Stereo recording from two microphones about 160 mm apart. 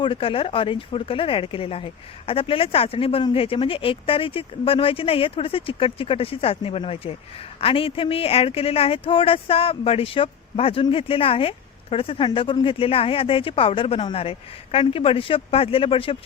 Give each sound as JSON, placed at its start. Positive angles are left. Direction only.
{"t": 0.0, "sound": "speech", "side_deg": 35}